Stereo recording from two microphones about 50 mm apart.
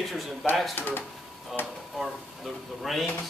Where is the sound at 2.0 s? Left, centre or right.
Centre.